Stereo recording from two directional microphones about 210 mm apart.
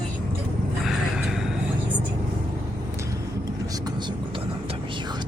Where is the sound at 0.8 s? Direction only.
Centre (ahead or behind).